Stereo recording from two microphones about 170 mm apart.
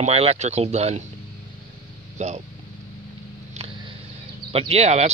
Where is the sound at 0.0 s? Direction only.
35° right (ahead or behind).